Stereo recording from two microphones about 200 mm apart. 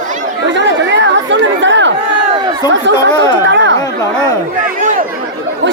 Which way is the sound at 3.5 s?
65° right (ahead or behind).